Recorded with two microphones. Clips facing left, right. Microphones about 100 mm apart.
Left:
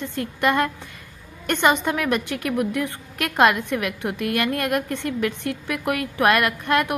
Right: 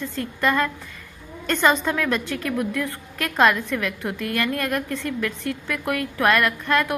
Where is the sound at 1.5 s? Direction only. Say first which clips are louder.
Even; 20° left (ahead or behind).